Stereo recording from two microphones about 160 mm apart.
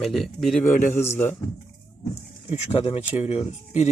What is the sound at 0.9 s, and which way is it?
Speech, 15° left (ahead or behind).